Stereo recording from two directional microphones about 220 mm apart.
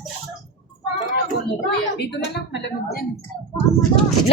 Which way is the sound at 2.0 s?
50° left (ahead or behind).